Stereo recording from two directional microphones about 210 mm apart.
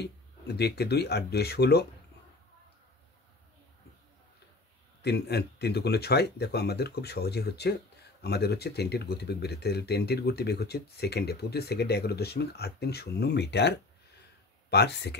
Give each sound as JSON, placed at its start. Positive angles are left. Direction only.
{"t": 0.6, "sound": "speech", "side_deg": 50}
{"t": 5.0, "sound": "speech", "side_deg": 50}